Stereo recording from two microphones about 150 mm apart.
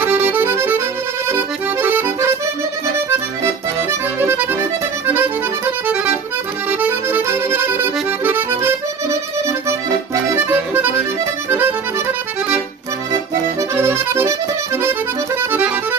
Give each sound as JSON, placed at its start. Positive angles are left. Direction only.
{"t": 0.0, "sound": "accordion", "side_deg": -10}
{"t": 1.8, "sound": "music", "side_deg": -15}
{"t": 3.8, "sound": "accordion", "side_deg": -15}
{"t": 6.7, "sound": "accordion", "side_deg": -10}